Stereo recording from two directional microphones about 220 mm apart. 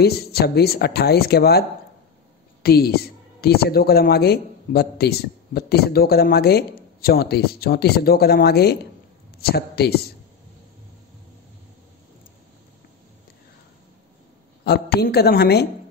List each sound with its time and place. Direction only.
0.0 s a woman's voice: 45° left (ahead or behind)
14.6 s a woman's voice: 45° left (ahead or behind)